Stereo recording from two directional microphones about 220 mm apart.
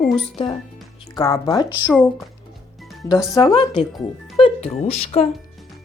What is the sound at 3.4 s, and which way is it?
A woman's voice, 25° left (ahead or behind).